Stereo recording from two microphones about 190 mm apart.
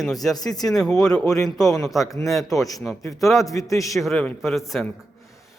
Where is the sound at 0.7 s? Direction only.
Centre (ahead or behind).